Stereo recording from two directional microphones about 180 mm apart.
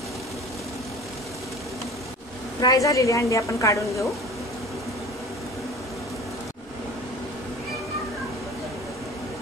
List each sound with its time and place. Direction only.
2.6 s a woman's voice: 20° left (ahead or behind)